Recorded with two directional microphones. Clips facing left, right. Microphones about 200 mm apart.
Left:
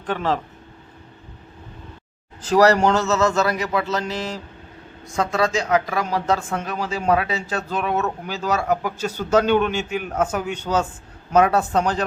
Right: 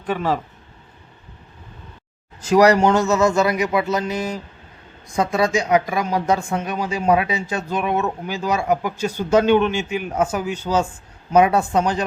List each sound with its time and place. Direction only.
0.0 s speech: 10° right (ahead or behind)
2.4 s speech: 10° right (ahead or behind)